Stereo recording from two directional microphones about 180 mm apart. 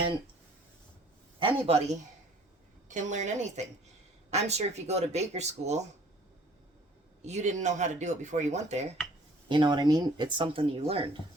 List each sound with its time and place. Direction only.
1.4 s speech: 30° right (ahead or behind)
7.3 s speech: 40° right (ahead or behind)
9.5 s speech: 25° right (ahead or behind)